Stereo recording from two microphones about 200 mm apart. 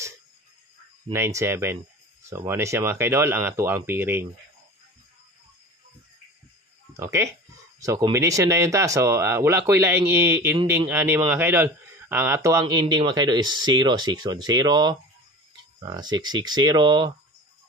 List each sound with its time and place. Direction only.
1.1 s speech: 15° right (ahead or behind)
6.9 s a man's voice: 15° right (ahead or behind)